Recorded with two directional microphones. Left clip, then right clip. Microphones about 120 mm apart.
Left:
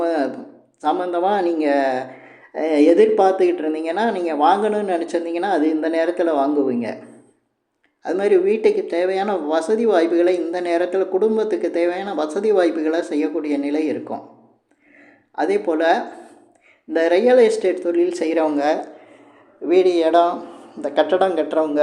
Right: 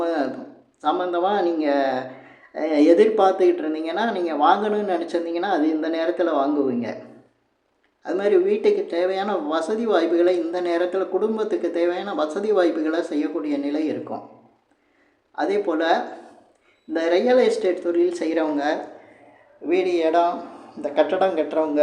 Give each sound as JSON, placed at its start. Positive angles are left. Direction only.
{"t": 0.0, "sound": "a sound", "side_deg": 25}
{"t": 0.8, "sound": "speech", "side_deg": 25}
{"t": 8.0, "sound": "speech", "side_deg": 25}
{"t": 15.4, "sound": "speech", "side_deg": 25}